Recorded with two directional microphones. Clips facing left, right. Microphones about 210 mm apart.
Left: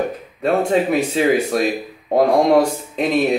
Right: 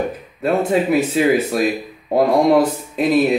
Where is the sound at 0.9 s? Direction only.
5° right (ahead or behind).